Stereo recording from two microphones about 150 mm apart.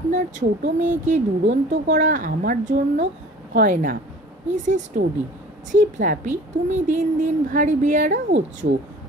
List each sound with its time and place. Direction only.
0.1 s speech: 55° right (ahead or behind)